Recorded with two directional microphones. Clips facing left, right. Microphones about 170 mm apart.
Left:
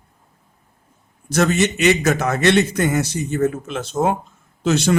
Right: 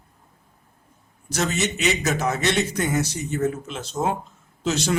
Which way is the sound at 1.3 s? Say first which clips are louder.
Left 7 dB; 55° left (ahead or behind).